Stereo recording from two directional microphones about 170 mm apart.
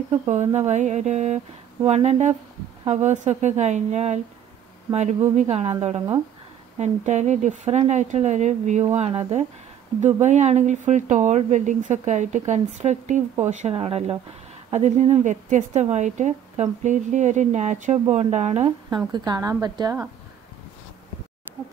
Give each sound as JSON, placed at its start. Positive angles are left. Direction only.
{"t": 0.1, "sound": "a woman's voice", "side_deg": -45}
{"t": 5.3, "sound": "a woman's voice", "side_deg": -40}
{"t": 19.1, "sound": "speech", "side_deg": -25}